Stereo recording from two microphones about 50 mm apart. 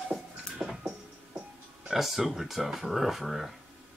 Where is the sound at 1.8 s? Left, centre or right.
Centre.